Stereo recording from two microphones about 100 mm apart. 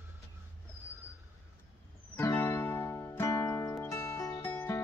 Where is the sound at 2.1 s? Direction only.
20° left (ahead or behind).